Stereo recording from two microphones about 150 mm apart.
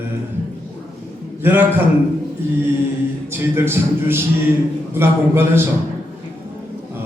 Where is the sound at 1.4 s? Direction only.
15° right (ahead or behind).